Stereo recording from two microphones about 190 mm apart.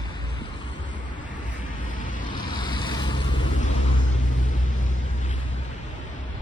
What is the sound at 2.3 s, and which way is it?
Vehicle, 25° left (ahead or behind).